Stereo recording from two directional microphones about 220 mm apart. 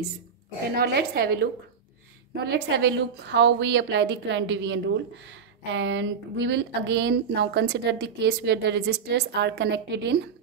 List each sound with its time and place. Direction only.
0.7 s a woman's voice: 45° right (ahead or behind)
2.5 s a woman's voice: 50° right (ahead or behind)